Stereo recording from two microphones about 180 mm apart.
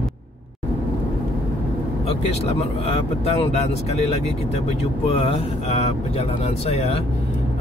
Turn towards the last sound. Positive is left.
turn(degrees=35)  # may be behind; listen again after turning